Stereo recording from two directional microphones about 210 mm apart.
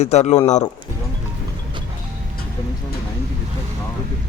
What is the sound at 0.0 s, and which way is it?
Speech, 30° left (ahead or behind).